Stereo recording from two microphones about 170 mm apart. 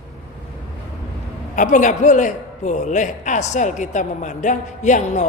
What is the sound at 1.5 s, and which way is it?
A man's voice, 45° left (ahead or behind).